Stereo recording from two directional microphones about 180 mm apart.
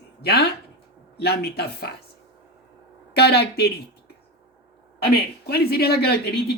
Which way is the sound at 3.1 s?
65° left (ahead or behind).